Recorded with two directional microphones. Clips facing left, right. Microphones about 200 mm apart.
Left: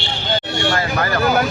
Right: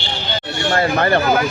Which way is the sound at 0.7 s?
30° right (ahead or behind).